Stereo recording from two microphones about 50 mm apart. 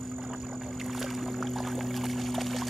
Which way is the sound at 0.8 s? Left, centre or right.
Centre.